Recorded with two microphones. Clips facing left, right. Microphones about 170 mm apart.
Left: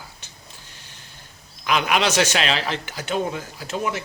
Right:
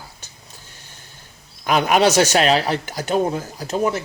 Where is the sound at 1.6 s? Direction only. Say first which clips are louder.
Right 5 dB; 40° right (ahead or behind).